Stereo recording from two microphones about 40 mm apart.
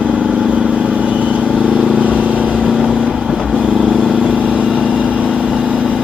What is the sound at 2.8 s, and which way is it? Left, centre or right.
Vehicle, centre.